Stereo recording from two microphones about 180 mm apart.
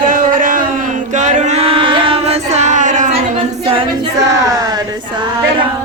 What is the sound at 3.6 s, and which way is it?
A capella, 30° right (ahead or behind).